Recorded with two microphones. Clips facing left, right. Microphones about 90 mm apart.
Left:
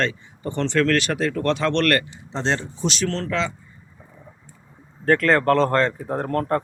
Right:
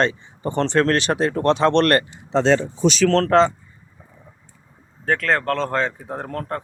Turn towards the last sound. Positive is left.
turn(degrees=0)  # may be behind; listen again after turning